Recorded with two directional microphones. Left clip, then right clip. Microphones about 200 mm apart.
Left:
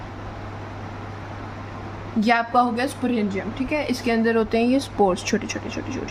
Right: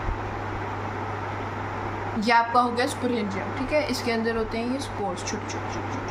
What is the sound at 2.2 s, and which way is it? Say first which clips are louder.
A man's voice: left 1 dB; 50° left (ahead or behind).